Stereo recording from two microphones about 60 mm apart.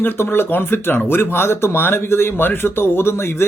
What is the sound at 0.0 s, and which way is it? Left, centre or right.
Speech, left.